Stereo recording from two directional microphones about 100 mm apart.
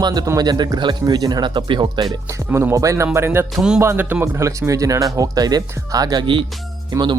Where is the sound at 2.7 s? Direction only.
30° right (ahead or behind).